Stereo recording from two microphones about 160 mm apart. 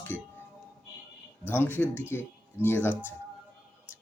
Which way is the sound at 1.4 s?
10° left (ahead or behind).